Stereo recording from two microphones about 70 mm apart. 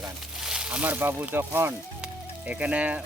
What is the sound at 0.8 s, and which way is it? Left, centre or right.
Speech, right.